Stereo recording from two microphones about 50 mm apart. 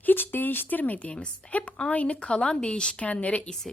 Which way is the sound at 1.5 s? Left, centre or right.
Left.